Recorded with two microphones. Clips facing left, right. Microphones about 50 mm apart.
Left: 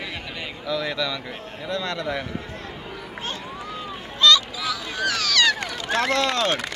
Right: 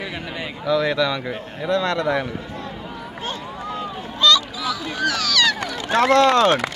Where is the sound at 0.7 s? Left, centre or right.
Right.